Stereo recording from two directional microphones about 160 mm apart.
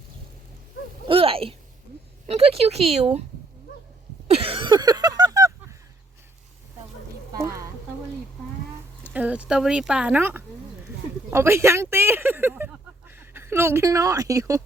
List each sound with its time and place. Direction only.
1.0 s a sound: 35° right (ahead or behind)
2.2 s speech: 40° right (ahead or behind)
4.3 s throat clearing: 35° right (ahead or behind)
9.1 s speech: 10° right (ahead or behind)